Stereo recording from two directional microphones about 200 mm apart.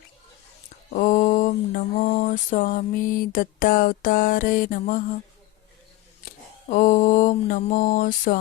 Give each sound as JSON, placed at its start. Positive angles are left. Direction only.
{"t": 0.9, "sound": "mantra", "side_deg": 40}
{"t": 6.7, "sound": "mantra", "side_deg": 40}